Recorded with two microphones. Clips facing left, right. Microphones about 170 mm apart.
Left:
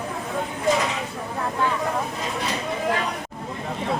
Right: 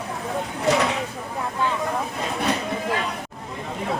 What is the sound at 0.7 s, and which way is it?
Chopping, 75° right (ahead or behind).